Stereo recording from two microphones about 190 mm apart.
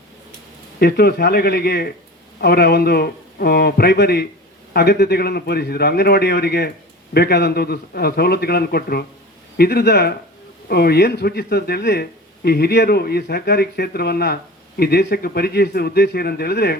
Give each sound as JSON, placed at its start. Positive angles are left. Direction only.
{"t": 0.8, "sound": "speech", "side_deg": 55}